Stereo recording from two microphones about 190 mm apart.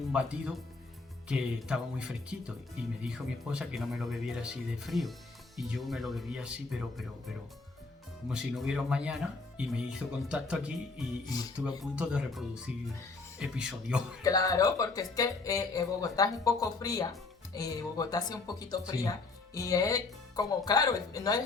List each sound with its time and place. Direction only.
0.1 s speech: 5° right (ahead or behind)
14.2 s speech: 20° left (ahead or behind)